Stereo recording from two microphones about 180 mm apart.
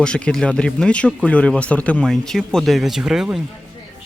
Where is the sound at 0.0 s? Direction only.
5° left (ahead or behind).